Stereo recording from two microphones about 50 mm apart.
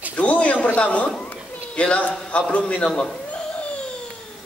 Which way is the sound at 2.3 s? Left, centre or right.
Left.